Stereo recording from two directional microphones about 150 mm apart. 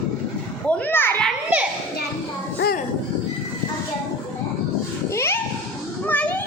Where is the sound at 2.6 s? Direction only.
90° left.